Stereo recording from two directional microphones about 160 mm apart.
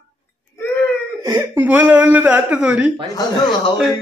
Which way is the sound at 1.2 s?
15° right (ahead or behind).